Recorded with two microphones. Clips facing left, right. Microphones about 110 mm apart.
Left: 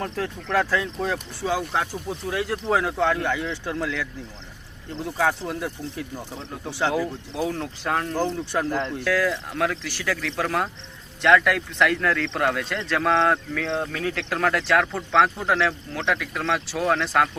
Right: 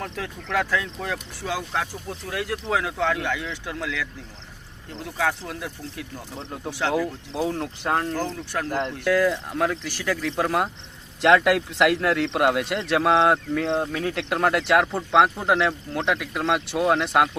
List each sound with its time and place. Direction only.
0.0 s speech: centre (ahead or behind)
7.9 s speech: 30° right (ahead or behind)
8.2 s speech: centre (ahead or behind)
9.0 s speech: 20° right (ahead or behind)
9.3 s a man's voice: 5° right (ahead or behind)
11.2 s speech: 25° right (ahead or behind)
13.7 s a man's voice: 15° right (ahead or behind)
15.1 s a man's voice: 10° right (ahead or behind)